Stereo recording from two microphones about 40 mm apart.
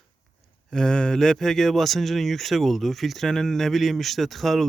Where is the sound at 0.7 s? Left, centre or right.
Centre.